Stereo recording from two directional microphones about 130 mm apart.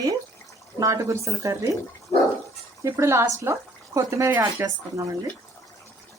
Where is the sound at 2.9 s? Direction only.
20° right (ahead or behind).